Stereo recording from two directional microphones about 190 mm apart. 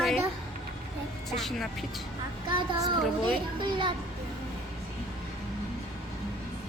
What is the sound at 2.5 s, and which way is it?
Speech, 20° right (ahead or behind).